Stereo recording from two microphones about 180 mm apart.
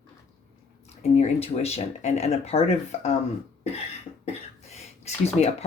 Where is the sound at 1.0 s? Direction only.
35° left (ahead or behind).